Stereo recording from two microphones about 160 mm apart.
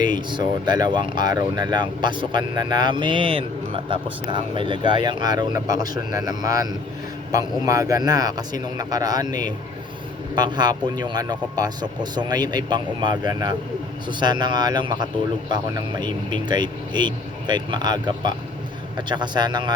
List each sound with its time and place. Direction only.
0.0 s speech: 30° right (ahead or behind)